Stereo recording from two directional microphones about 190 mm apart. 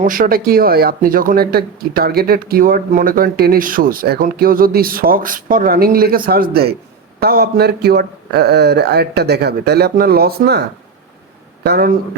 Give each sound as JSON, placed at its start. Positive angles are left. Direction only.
{"t": 0.0, "sound": "a man's voice", "side_deg": -45}
{"t": 11.6, "sound": "a man's voice", "side_deg": -55}